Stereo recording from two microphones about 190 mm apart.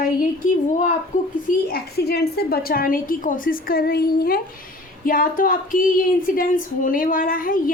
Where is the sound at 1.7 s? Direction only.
55° left (ahead or behind).